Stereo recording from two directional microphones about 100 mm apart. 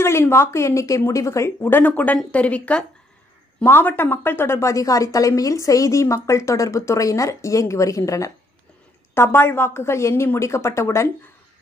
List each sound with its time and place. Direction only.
0.0 s a woman's voice: 25° left (ahead or behind)